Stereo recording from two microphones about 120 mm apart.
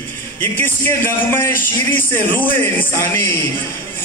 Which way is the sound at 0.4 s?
15° left (ahead or behind).